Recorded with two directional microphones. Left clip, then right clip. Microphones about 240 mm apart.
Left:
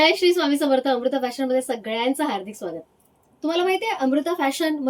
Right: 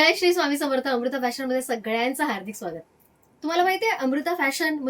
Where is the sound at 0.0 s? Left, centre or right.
Centre.